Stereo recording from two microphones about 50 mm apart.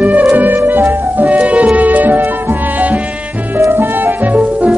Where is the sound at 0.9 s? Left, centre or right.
Right.